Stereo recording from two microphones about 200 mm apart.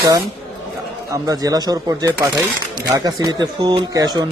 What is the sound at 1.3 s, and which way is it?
Speech, 20° right (ahead or behind).